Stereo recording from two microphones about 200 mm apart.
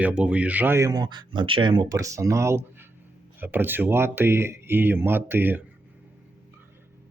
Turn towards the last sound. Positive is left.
turn(degrees=-10)  # may be behind; listen again after turning